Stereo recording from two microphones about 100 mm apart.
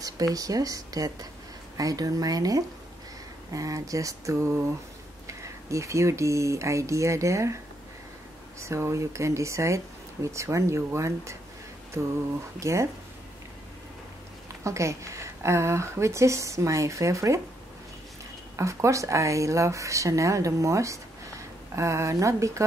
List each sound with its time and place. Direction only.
0.3 s a woman's voice: 35° right (ahead or behind)
8.5 s a woman's voice: 30° right (ahead or behind)
12.5 s a woman's voice: 30° right (ahead or behind)
14.6 s a woman's voice: 30° right (ahead or behind)
18.6 s a woman's voice: 30° right (ahead or behind)